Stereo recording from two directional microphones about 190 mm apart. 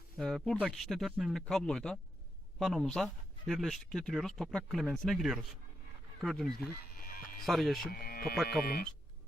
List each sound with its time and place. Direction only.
0.2 s speech: centre (ahead or behind)
7.0 s music: 50° left (ahead or behind)
7.4 s speech: centre (ahead or behind)
7.9 s speech: 50° left (ahead or behind)